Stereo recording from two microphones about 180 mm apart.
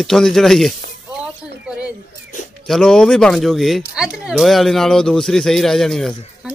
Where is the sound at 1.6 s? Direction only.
5° right (ahead or behind).